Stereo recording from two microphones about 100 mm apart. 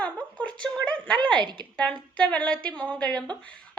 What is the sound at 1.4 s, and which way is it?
Speech, 50° right (ahead or behind).